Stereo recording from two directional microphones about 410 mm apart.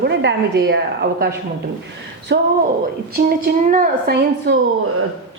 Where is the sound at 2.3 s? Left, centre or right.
Right.